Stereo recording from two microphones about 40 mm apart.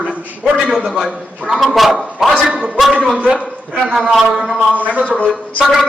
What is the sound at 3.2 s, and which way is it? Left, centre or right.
Speech, right.